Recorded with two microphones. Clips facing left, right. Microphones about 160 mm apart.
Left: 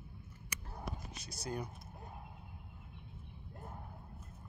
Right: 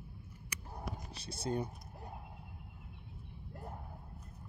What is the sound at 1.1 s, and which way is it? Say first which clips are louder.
Speech: right 7 dB; 30° right (ahead or behind).